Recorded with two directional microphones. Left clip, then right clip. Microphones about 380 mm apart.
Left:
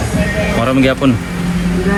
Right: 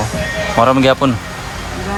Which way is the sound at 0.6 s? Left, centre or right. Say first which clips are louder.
Right 4 dB; centre.